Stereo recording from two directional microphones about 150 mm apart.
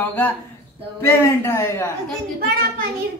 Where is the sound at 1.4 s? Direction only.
15° left (ahead or behind).